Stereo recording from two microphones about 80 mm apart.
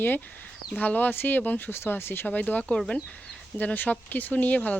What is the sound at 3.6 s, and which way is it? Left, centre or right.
Speech, left.